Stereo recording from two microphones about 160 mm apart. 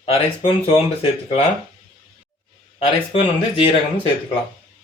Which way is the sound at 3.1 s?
40° left (ahead or behind).